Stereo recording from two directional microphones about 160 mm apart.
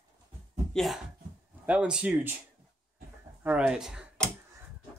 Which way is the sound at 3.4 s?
10° right (ahead or behind).